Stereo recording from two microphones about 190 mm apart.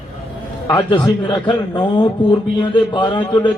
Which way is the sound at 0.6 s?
20° left (ahead or behind).